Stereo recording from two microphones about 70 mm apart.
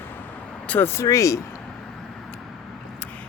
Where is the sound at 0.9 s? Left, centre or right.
Left.